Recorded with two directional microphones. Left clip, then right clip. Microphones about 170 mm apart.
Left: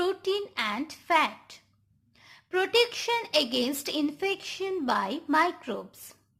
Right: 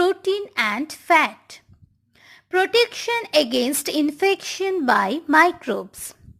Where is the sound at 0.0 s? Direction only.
30° right (ahead or behind).